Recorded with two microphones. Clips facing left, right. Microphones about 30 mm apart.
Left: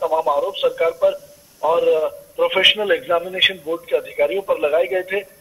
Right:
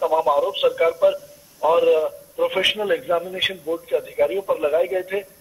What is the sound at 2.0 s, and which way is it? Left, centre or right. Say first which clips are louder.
A man's voice: left 3 dB; left.